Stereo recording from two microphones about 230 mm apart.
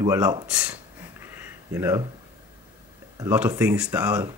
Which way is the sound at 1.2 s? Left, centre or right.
Centre.